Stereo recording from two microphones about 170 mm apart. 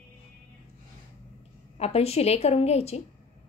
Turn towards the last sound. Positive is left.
turn(degrees=35)  # may be behind; listen again after turning